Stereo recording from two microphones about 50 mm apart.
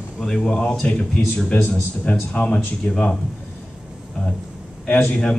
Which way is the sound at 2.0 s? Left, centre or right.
Left.